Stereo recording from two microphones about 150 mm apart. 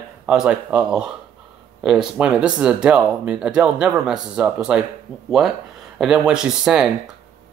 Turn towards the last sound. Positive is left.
turn(degrees=-5)  # may be behind; listen again after turning